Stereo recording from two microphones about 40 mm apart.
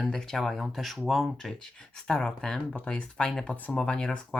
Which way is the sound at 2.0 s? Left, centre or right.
Centre.